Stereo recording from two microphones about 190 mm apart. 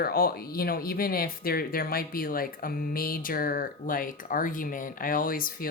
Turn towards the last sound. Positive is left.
turn(degrees=50)  # may be behind; listen again after turning